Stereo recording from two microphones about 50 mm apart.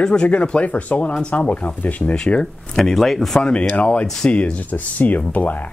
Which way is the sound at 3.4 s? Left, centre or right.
Left.